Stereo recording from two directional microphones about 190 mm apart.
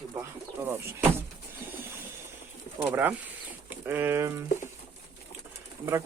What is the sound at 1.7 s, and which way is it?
Train, 10° right (ahead or behind).